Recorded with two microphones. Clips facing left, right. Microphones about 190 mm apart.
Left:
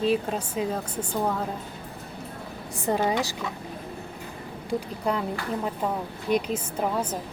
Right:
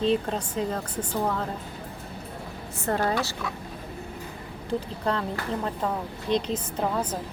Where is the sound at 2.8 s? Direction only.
15° left (ahead or behind).